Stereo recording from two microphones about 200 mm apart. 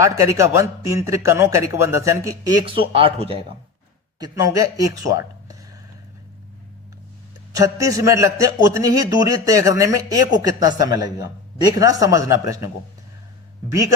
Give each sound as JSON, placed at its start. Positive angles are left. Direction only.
{"t": 0.0, "sound": "speech", "side_deg": -15}
{"t": 7.5, "sound": "speech", "side_deg": -15}